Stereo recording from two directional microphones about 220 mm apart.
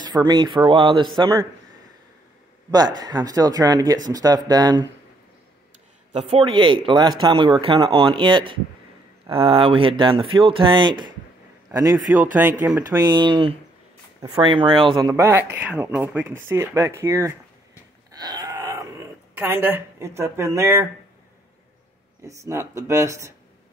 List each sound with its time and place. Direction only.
0.0 s a man's voice: 20° right (ahead or behind)
2.7 s speech: 20° right (ahead or behind)
6.1 s a man's voice: 25° right (ahead or behind)
18.1 s groan: 20° right (ahead or behind)
22.2 s speech: 15° right (ahead or behind)